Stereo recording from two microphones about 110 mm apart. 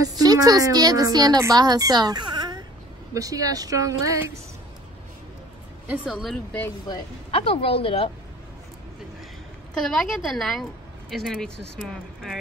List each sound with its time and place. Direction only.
0.0 s a woman's voice: 35° right (ahead or behind)
5.9 s a woman's voice: 5° right (ahead or behind)
7.2 s speech: 60° left (ahead or behind)
9.8 s a woman's voice: 5° left (ahead or behind)